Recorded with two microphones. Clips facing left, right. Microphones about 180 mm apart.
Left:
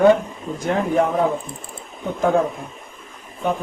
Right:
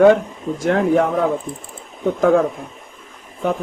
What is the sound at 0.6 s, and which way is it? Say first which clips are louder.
Speech: right 3 dB; 90° right.